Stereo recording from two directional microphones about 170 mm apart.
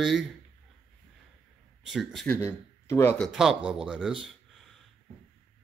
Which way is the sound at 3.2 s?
Centre (ahead or behind).